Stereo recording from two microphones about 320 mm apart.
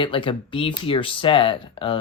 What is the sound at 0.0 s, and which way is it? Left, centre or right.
Speech, centre.